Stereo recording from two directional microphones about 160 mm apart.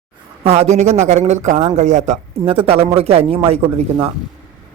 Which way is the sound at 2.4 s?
35° right (ahead or behind).